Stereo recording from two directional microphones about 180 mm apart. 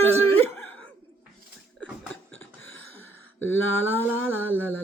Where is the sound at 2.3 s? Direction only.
90° left.